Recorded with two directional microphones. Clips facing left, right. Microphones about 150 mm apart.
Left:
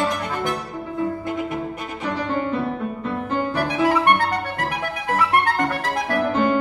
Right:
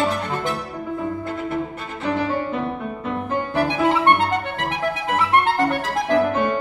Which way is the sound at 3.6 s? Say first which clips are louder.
Right 2 dB; 25° right (ahead or behind).